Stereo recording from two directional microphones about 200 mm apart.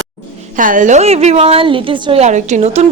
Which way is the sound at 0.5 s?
40° right (ahead or behind).